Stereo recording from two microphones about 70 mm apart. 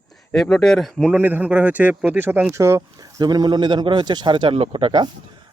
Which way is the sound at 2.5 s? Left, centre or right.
Right.